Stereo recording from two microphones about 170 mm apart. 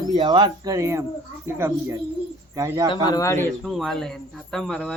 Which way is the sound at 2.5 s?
20° right (ahead or behind).